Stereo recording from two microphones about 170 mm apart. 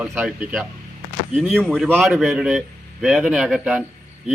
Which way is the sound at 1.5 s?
Centre (ahead or behind).